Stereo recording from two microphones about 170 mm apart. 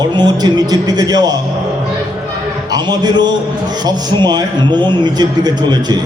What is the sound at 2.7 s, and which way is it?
Speech, 25° right (ahead or behind).